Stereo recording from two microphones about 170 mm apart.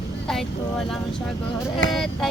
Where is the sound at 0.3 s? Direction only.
Centre (ahead or behind).